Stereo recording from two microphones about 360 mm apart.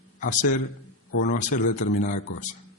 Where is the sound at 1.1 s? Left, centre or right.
Left.